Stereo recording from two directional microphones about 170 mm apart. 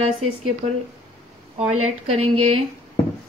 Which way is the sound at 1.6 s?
40° right (ahead or behind).